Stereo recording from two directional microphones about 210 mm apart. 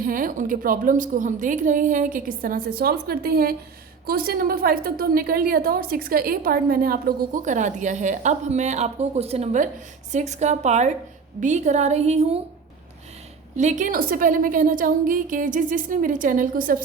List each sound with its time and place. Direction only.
0.0 s a woman's voice: 40° right (ahead or behind)
13.6 s a woman's voice: 35° right (ahead or behind)